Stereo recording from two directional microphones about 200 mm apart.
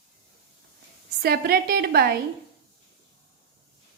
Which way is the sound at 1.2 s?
50° right (ahead or behind).